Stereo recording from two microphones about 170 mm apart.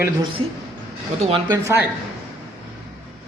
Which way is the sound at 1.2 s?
30° right (ahead or behind).